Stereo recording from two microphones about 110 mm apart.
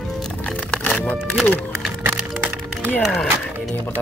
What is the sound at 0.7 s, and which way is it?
Music, 10° left (ahead or behind).